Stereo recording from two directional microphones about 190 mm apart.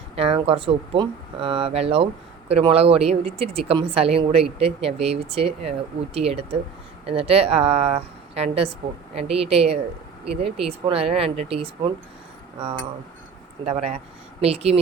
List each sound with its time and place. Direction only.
0.2 s speech: 30° right (ahead or behind)
13.7 s speech: 35° right (ahead or behind)